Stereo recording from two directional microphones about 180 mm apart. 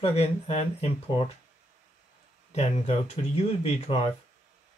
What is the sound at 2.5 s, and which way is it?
Speech, 35° left (ahead or behind).